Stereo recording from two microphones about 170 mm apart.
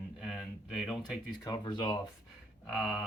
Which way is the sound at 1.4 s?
25° left (ahead or behind).